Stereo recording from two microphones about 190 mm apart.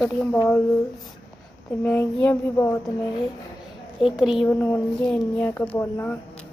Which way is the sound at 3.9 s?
Centre (ahead or behind).